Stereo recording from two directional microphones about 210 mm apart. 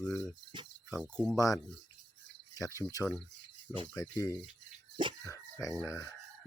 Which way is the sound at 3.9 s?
15° left (ahead or behind).